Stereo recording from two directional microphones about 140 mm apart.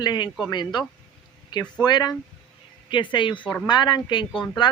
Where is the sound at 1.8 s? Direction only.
30° left (ahead or behind).